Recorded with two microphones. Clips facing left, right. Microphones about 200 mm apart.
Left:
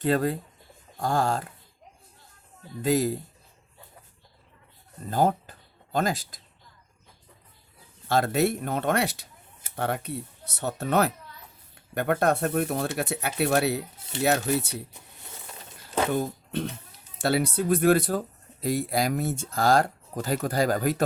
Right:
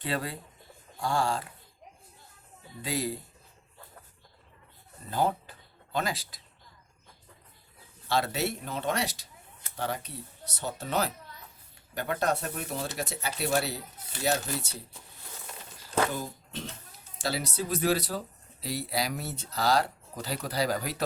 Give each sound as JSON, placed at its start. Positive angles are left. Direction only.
{"t": 0.0, "sound": "speech", "side_deg": 45}
{"t": 2.8, "sound": "speech", "side_deg": 45}
{"t": 5.1, "sound": "speech", "side_deg": 45}
{"t": 8.0, "sound": "speech", "side_deg": 50}
{"t": 16.1, "sound": "speech", "side_deg": 60}